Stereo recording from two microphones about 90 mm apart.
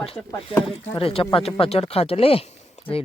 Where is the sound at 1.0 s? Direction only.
90° left.